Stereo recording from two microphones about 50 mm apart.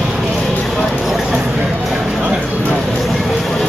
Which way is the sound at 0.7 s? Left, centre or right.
Centre.